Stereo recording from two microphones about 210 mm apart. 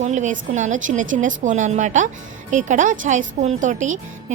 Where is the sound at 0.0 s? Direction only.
35° right (ahead or behind).